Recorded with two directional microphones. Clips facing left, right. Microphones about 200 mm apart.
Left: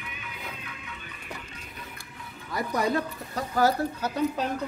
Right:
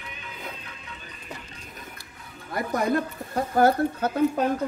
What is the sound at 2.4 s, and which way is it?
Speech, 50° right (ahead or behind).